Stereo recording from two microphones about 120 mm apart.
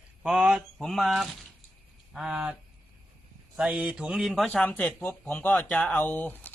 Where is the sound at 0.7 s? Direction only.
Centre (ahead or behind).